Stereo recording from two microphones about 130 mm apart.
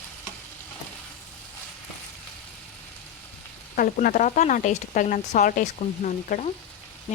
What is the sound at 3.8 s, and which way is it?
Speech, 90° left.